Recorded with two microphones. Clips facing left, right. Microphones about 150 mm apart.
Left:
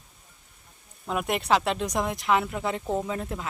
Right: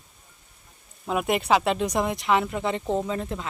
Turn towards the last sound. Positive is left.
turn(degrees=0)  # may be behind; listen again after turning